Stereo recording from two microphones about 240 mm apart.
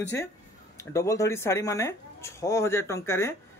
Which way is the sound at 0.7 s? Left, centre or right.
Centre.